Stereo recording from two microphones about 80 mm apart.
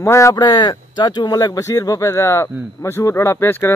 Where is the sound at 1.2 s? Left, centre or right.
Left.